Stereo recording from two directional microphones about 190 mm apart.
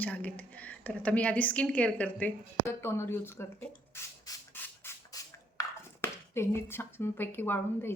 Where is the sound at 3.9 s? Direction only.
15° left (ahead or behind).